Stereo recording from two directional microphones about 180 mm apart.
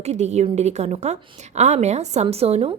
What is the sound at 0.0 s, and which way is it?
Speech, 40° right (ahead or behind).